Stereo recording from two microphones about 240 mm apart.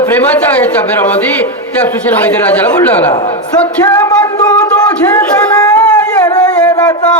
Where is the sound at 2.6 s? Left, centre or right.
Centre.